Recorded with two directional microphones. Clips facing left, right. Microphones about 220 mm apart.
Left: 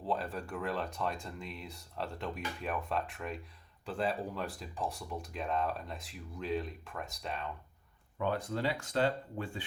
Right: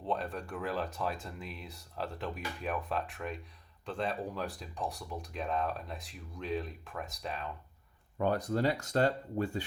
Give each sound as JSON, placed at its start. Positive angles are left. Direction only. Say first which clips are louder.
{"t": 0.0, "sound": "speech", "louder": "even", "side_deg": 0}
{"t": 8.2, "sound": "speech", "louder": "right 3 dB", "side_deg": -40}